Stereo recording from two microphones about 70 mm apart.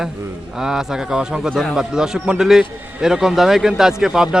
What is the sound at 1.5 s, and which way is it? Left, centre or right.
Speech, centre.